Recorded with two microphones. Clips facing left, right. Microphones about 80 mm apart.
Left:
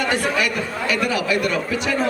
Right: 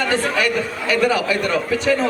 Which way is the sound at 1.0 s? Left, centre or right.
Right.